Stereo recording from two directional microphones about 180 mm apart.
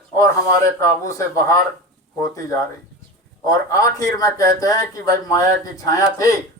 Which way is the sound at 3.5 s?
20° left (ahead or behind).